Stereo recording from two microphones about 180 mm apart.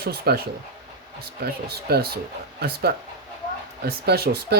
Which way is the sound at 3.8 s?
60° right (ahead or behind).